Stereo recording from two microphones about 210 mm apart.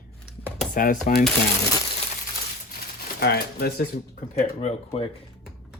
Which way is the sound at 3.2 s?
50° left (ahead or behind).